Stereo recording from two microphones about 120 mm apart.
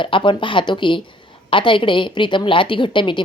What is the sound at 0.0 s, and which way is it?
A woman's voice, 45° left (ahead or behind).